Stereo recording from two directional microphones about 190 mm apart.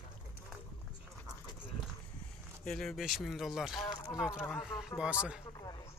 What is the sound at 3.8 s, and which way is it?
Speech, 20° left (ahead or behind).